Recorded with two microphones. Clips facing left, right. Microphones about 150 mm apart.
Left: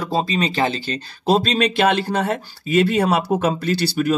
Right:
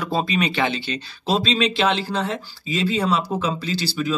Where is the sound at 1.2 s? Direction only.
50° left (ahead or behind).